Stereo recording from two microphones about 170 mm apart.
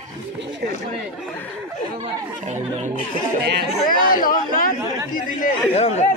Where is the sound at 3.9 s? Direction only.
55° left (ahead or behind).